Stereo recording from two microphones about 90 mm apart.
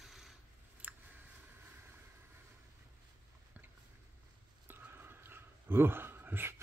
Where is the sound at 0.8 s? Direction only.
15° right (ahead or behind).